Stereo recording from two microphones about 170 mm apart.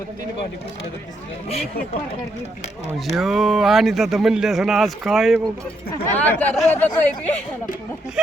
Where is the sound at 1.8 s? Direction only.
65° left (ahead or behind).